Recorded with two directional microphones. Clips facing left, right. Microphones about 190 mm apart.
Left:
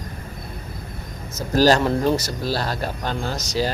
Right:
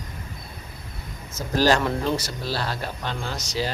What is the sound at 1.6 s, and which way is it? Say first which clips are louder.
Speech: left 4 dB; 35° left (ahead or behind).